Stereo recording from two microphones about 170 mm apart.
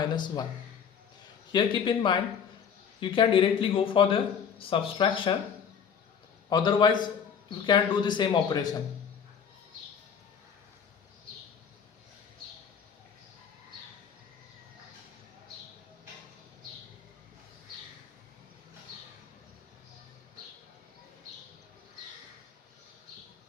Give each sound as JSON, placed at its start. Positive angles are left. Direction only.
{"t": 0.0, "sound": "speech", "side_deg": 25}
{"t": 1.5, "sound": "speech", "side_deg": 30}
{"t": 6.5, "sound": "speech", "side_deg": 25}